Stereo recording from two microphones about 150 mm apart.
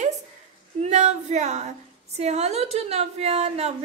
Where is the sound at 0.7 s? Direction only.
50° right (ahead or behind).